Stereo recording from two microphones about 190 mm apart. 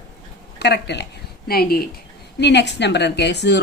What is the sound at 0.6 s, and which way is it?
A woman's voice, 60° left (ahead or behind).